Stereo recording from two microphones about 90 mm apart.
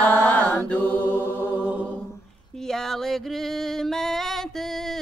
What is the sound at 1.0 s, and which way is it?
Chant, 25° right (ahead or behind).